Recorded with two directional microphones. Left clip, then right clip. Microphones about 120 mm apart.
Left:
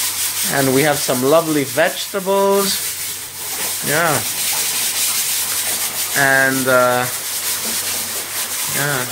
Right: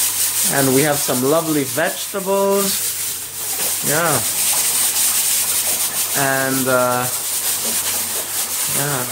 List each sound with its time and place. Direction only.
0.5 s sanding: 15° right (ahead or behind)
0.8 s sanding: 5° right (ahead or behind)
3.9 s sanding: centre (ahead or behind)
6.1 s sanding: centre (ahead or behind)
8.7 s rub: 5° left (ahead or behind)